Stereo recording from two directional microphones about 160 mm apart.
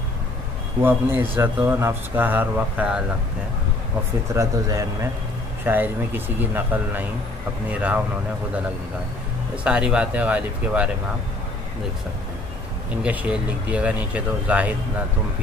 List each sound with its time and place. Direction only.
0.8 s a man's voice: 15° right (ahead or behind)
4.3 s a man's voice: 20° right (ahead or behind)
9.6 s a man's voice: 5° right (ahead or behind)
13.0 s a man's voice: 10° right (ahead or behind)